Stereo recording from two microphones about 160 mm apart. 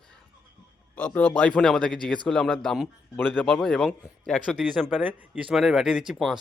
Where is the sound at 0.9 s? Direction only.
10° left (ahead or behind).